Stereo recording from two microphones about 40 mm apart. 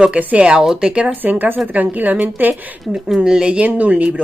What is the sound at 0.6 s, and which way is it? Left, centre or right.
Speech, right.